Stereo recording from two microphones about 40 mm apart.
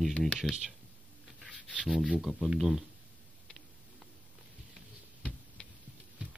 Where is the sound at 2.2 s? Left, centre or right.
Centre.